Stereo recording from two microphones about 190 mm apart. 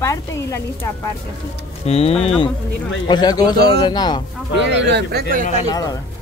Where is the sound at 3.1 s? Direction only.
20° left (ahead or behind).